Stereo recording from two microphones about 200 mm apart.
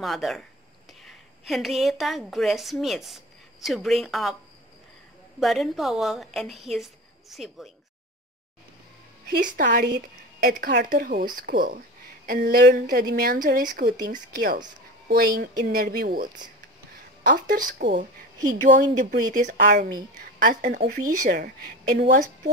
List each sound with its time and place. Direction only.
0.0 s a woman's voice: centre (ahead or behind)
5.4 s a woman's voice: centre (ahead or behind)
9.3 s a woman's voice: 40° right (ahead or behind)